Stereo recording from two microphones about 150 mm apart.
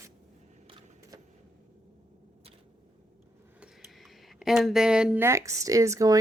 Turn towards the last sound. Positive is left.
turn(degrees=-20)  # may be behind; listen again after turning